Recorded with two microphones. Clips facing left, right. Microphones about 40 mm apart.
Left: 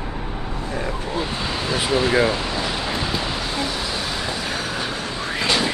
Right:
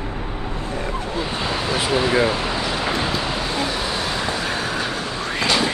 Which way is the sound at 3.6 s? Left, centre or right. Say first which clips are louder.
Right 2 dB; centre.